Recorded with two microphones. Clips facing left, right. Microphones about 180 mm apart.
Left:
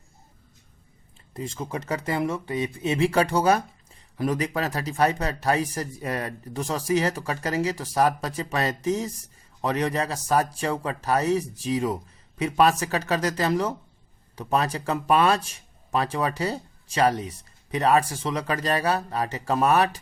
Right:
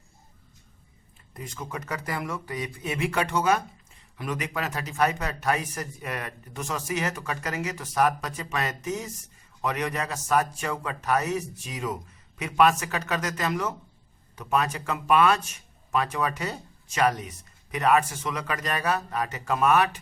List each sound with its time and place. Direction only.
1.3 s speech: 25° left (ahead or behind)